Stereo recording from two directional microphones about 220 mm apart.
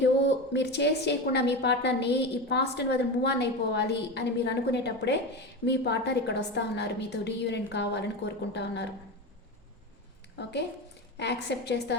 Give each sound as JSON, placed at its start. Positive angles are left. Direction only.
{"t": 0.0, "sound": "a woman's voice", "side_deg": 55}
{"t": 11.2, "sound": "a woman's voice", "side_deg": 50}